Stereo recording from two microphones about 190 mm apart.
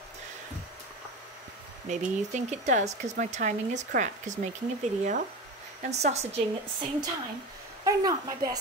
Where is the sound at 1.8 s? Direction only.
40° right (ahead or behind).